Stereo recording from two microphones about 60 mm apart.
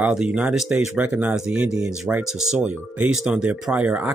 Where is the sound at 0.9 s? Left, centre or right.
Right.